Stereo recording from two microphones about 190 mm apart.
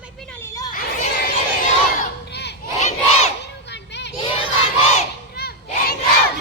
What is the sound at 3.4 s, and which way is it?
Children playing, 65° left (ahead or behind).